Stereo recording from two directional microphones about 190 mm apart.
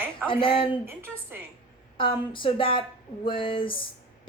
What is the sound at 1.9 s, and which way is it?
Speech, 25° left (ahead or behind).